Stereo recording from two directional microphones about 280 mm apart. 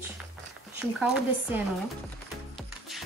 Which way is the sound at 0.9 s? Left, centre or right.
Centre.